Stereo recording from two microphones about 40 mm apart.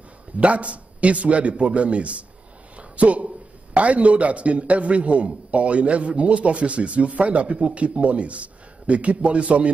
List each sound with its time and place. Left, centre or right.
0.4 s a man's voice: right
2.8 s a sound: right
3.7 s a man's voice: right